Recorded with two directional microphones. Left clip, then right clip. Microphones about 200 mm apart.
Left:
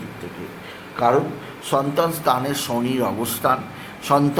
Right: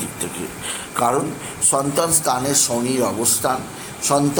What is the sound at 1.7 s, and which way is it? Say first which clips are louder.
A man's voice: left 1 dB; 5° right (ahead or behind).